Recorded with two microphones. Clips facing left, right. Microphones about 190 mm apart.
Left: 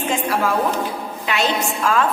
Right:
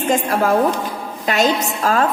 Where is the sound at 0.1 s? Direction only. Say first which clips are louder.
Right 5 dB; 45° right (ahead or behind).